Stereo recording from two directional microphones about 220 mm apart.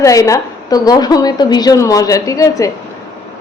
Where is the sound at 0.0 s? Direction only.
15° left (ahead or behind).